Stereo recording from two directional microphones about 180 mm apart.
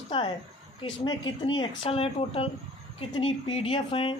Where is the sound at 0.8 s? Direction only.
25° left (ahead or behind).